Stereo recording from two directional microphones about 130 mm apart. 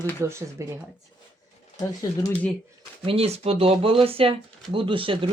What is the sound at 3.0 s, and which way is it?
Speech, 45° right (ahead or behind).